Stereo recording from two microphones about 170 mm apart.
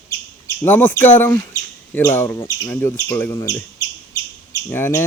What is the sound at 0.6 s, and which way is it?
Bird, 10° left (ahead or behind).